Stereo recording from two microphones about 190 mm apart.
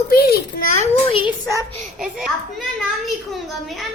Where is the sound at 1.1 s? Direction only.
25° left (ahead or behind).